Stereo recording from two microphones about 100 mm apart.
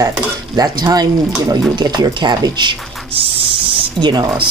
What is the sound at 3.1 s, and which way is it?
Speech, 65° right (ahead or behind).